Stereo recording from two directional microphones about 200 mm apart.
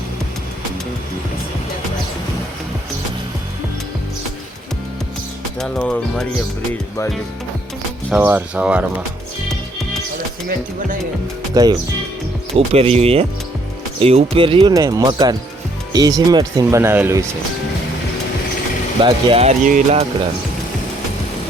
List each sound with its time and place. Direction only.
5.5 s speech: 5° left (ahead or behind)
8.1 s speech: 10° right (ahead or behind)
11.5 s speech: 20° right (ahead or behind)
19.0 s speech: 30° right (ahead or behind)